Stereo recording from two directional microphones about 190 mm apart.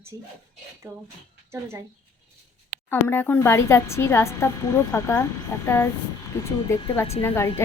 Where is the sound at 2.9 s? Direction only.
10° left (ahead or behind).